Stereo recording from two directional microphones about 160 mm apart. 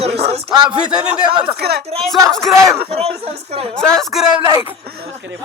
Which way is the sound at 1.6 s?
90° right.